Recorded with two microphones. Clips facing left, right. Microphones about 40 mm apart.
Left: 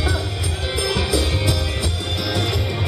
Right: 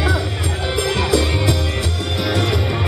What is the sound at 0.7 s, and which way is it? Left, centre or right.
Music, centre.